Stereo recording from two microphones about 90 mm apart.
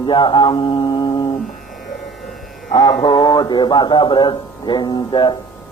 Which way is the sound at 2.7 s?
50° left (ahead or behind).